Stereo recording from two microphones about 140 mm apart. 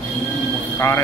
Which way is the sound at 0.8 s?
20° left (ahead or behind).